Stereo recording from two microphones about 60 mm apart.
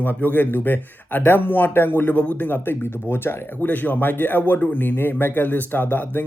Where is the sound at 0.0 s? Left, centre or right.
Left.